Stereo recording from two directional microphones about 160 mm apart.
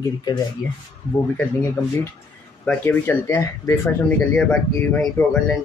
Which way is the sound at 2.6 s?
15° left (ahead or behind).